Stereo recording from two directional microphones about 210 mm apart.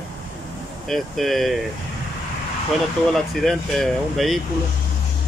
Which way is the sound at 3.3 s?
Centre (ahead or behind).